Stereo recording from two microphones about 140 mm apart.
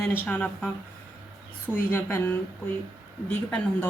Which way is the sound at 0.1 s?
10° left (ahead or behind).